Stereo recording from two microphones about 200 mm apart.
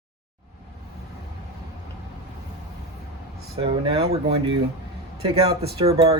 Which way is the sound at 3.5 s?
30° right (ahead or behind).